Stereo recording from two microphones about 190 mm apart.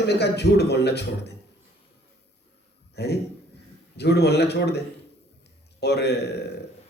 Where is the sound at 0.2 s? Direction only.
60° left (ahead or behind).